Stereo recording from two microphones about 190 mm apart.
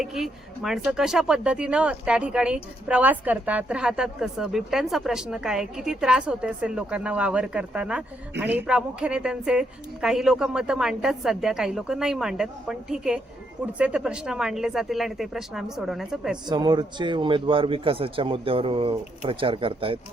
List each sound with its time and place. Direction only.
0.0 s speech: centre (ahead or behind)
16.5 s a man's voice: 20° right (ahead or behind)